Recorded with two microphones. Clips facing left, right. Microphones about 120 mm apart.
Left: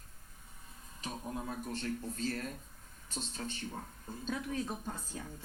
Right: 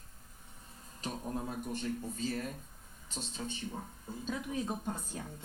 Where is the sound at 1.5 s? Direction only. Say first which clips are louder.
Right 1 dB; 15° right (ahead or behind).